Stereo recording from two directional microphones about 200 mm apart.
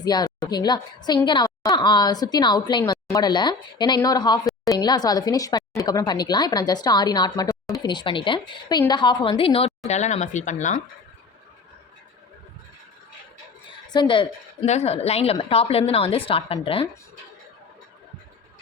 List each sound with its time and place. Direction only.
0.0 s a woman's voice: 20° left (ahead or behind); by 10.8 s 35° left (ahead or behind)
13.9 s a woman's voice: 25° left (ahead or behind)